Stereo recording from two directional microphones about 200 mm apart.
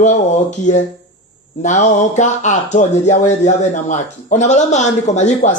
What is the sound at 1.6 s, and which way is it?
A man's voice, 35° left (ahead or behind).